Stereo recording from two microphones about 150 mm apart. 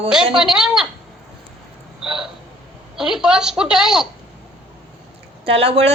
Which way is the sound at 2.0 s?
5° right (ahead or behind).